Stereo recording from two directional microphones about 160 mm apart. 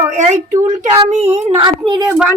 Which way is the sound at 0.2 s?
50° right (ahead or behind).